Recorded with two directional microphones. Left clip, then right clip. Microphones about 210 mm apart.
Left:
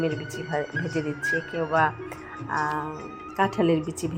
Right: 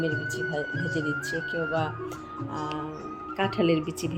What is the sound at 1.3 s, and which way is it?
Speech, 20° left (ahead or behind).